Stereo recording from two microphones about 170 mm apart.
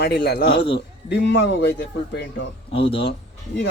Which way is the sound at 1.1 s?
90° left.